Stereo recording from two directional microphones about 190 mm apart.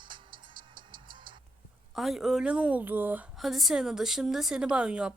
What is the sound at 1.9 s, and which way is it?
A woman's voice, centre (ahead or behind).